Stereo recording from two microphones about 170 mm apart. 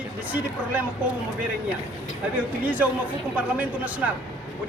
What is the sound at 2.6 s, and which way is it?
Speech, 10° right (ahead or behind).